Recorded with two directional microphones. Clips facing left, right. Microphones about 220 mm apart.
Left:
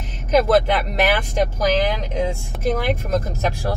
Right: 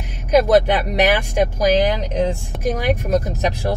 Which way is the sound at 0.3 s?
15° right (ahead or behind).